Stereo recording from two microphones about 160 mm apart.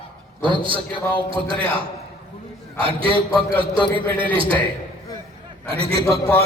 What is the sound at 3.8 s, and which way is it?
Speech, 10° left (ahead or behind).